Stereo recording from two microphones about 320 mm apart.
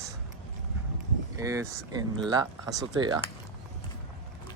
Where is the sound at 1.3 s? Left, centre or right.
Centre.